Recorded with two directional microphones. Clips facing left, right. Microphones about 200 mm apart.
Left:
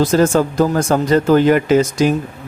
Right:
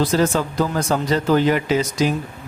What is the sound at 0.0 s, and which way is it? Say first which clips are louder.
Speech: left 5 dB; 45° left (ahead or behind).